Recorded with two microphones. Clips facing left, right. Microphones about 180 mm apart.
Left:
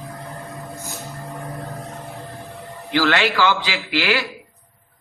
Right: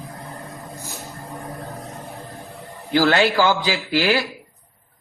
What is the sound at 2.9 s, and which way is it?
A man's voice, 40° right (ahead or behind).